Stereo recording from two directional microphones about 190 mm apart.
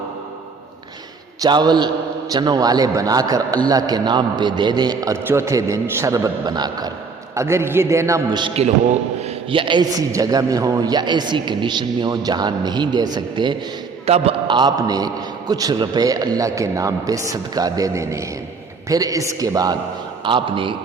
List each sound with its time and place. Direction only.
1.4 s a man's voice: 20° right (ahead or behind)